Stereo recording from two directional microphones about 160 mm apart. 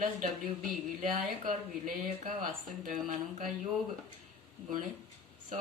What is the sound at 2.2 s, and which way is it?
Speech, 60° right (ahead or behind).